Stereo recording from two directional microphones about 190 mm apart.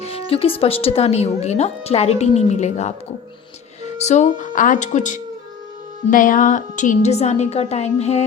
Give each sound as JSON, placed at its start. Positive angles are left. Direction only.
{"t": 0.1, "sound": "speech", "side_deg": 30}